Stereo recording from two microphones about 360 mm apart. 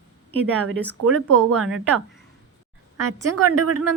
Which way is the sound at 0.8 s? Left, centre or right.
Centre.